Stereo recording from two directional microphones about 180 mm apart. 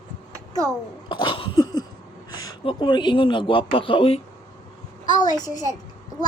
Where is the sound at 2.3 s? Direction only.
25° left (ahead or behind).